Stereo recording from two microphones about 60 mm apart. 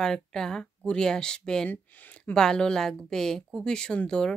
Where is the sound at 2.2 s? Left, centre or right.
Centre.